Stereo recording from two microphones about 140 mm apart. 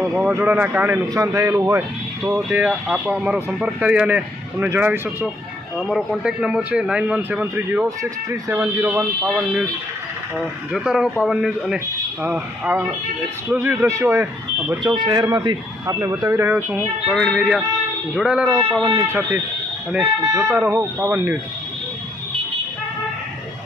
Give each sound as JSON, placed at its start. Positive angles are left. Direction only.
{"t": 0.3, "sound": "a man's voice", "side_deg": -10}
{"t": 1.0, "sound": "speech", "side_deg": -25}
{"t": 2.2, "sound": "a man's voice", "side_deg": -10}
{"t": 5.8, "sound": "a man's voice", "side_deg": 0}
{"t": 9.3, "sound": "a man's voice", "side_deg": 5}
{"t": 10.7, "sound": "a man's voice", "side_deg": -5}
{"t": 12.2, "sound": "a man's voice", "side_deg": -15}
{"t": 14.9, "sound": "speech", "side_deg": -30}
{"t": 17.1, "sound": "a man's voice", "side_deg": 0}
{"t": 18.9, "sound": "a man's voice", "side_deg": -15}
{"t": 20.5, "sound": "a man's voice", "side_deg": -10}